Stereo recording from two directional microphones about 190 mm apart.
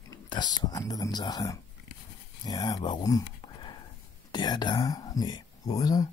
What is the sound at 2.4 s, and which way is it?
Speech, 20° left (ahead or behind).